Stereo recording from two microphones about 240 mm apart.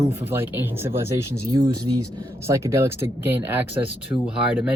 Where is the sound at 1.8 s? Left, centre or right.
Right.